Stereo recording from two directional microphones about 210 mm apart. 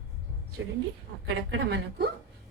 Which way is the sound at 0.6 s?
55° right (ahead or behind).